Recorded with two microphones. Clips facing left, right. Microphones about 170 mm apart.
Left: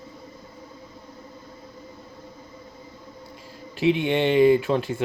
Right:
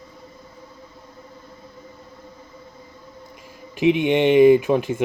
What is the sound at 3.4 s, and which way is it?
Speech, 15° right (ahead or behind).